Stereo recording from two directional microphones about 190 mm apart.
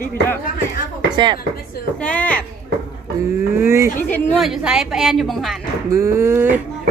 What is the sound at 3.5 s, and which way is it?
Speech, 15° right (ahead or behind).